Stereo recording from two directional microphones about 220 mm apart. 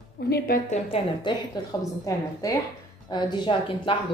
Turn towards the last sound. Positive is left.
turn(degrees=25)  # may be behind; listen again after turning